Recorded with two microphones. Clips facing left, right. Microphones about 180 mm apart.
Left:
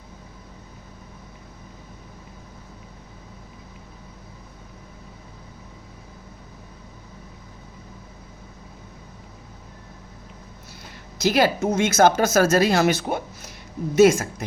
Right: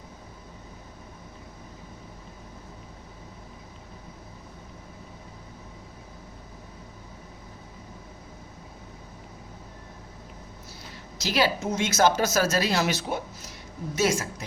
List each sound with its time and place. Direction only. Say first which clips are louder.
11.2 s speech: left 6 dB; 50° left (ahead or behind)